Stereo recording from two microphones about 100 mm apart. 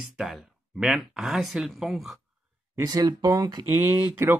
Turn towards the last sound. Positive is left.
turn(degrees=-25)  # may be behind; listen again after turning